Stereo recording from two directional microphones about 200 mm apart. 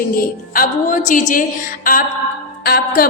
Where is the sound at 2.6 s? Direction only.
50° left (ahead or behind).